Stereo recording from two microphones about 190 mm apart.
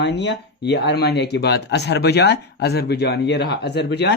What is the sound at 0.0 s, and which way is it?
Speech, 65° left (ahead or behind).